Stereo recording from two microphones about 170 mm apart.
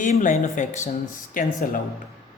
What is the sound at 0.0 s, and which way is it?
Speech, 50° left (ahead or behind).